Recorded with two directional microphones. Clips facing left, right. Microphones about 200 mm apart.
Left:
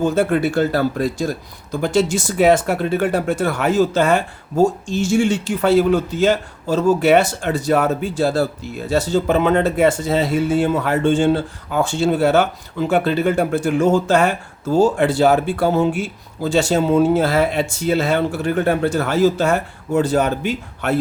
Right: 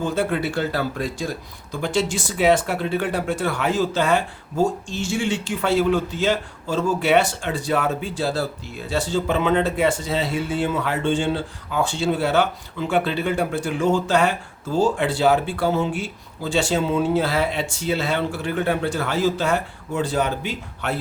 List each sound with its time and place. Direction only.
0.0 s speech: 45° left (ahead or behind)